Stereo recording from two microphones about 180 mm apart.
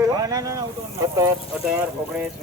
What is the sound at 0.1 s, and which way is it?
A man's voice, 20° right (ahead or behind).